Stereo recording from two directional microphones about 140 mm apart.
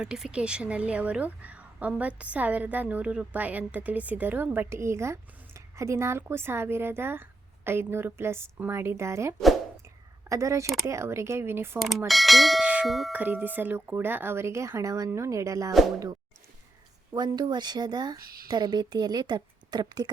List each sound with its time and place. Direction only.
0.0 s a woman's voice: 5° right (ahead or behind)
11.8 s speech: centre (ahead or behind)
13.1 s a woman's voice: 10° right (ahead or behind)
17.2 s speech: 30° right (ahead or behind)
18.2 s speech: 90° right
18.4 s a woman's voice: 30° right (ahead or behind)